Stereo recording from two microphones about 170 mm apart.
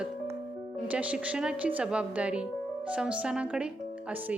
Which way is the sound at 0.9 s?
5° right (ahead or behind).